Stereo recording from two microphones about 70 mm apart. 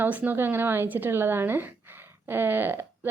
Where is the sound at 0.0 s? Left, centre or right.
Right.